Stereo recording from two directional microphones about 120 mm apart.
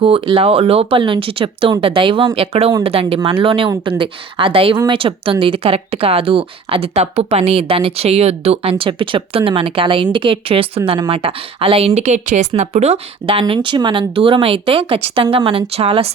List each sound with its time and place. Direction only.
0.0 s speech: 50° right (ahead or behind); by 12.5 s 90° right
12.5 s speech: 65° right (ahead or behind)
13.5 s speech: 45° right (ahead or behind)